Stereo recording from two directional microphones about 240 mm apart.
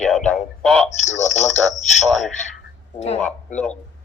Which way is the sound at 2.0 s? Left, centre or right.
Centre.